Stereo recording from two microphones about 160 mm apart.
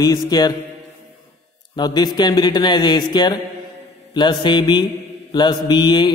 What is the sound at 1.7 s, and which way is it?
Mantra, 25° left (ahead or behind).